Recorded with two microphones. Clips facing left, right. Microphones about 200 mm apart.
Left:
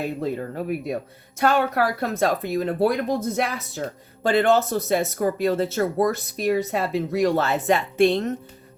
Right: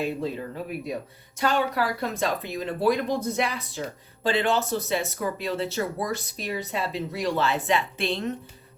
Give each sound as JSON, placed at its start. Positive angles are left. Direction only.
{"t": 0.2, "sound": "speech", "side_deg": 50}